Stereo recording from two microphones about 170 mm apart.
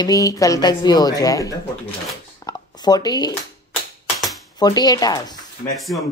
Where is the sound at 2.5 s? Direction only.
20° left (ahead or behind).